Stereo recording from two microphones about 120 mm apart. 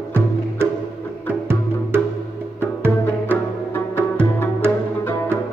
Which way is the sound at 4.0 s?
15° left (ahead or behind).